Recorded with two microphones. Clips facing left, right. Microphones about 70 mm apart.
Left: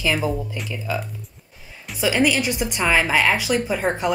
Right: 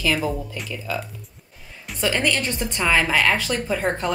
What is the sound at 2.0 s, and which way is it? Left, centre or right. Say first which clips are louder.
Speech: left 3 dB; centre.